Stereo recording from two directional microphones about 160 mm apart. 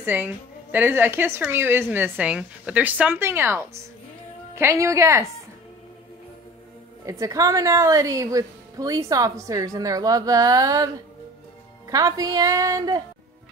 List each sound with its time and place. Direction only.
0.0 s a woman's voice: 10° right (ahead or behind)
7.1 s a woman's voice: 20° right (ahead or behind)
11.9 s a woman's voice: 20° right (ahead or behind)